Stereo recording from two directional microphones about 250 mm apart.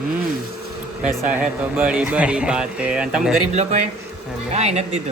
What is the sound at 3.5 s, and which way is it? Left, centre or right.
Speech, right.